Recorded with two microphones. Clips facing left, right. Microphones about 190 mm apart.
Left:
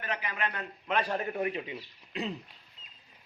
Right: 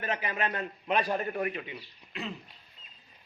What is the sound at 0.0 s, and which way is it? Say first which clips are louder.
Speech: right 3 dB; 25° right (ahead or behind).